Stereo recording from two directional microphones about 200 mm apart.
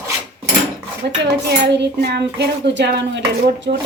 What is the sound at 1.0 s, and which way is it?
Speech, 55° right (ahead or behind).